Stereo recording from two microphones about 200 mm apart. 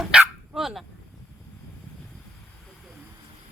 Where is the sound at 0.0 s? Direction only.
Centre (ahead or behind).